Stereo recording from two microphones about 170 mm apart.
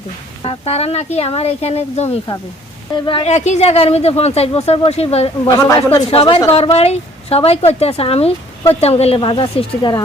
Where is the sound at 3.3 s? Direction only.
40° left (ahead or behind).